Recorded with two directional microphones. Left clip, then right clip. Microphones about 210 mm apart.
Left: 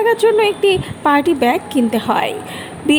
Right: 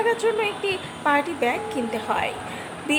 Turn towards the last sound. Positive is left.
turn(degrees=30)  # may be behind; listen again after turning